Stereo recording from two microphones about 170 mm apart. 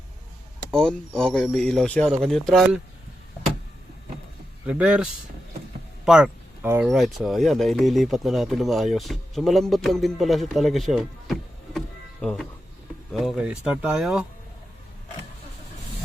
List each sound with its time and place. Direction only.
0.7 s speech: 5° left (ahead or behind)
4.6 s speech: 5° right (ahead or behind)
6.1 s a sound: 5° right (ahead or behind)
6.8 s speech: centre (ahead or behind)